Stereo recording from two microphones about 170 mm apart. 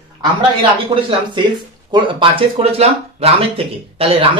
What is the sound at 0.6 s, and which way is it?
Speech, 30° right (ahead or behind).